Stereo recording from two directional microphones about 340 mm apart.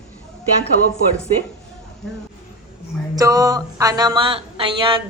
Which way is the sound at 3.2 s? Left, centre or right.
Centre.